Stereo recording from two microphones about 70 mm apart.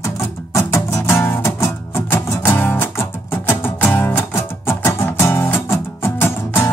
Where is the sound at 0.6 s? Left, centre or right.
Left.